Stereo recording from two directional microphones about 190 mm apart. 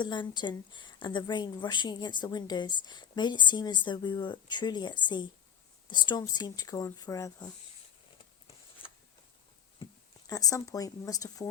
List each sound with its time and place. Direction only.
0.0 s a woman's voice: 25° left (ahead or behind)
10.2 s a woman's voice: 20° left (ahead or behind)